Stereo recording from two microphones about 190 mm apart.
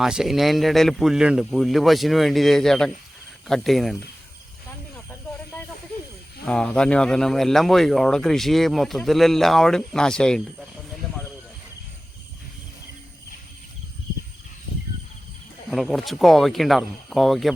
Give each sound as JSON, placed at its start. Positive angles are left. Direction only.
{"t": 0.0, "sound": "speech", "side_deg": -5}
{"t": 6.4, "sound": "speech", "side_deg": 5}
{"t": 15.7, "sound": "speech", "side_deg": 0}